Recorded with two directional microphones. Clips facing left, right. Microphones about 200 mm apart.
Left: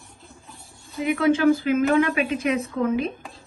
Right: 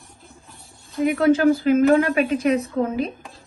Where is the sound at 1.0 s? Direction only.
45° right (ahead or behind).